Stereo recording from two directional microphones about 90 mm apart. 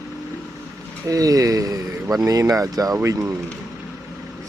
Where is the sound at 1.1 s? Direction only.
40° right (ahead or behind).